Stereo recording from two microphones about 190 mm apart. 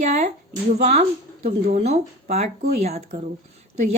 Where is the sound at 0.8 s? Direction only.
35° right (ahead or behind).